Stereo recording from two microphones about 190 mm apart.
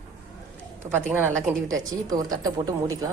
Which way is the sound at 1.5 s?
20° right (ahead or behind).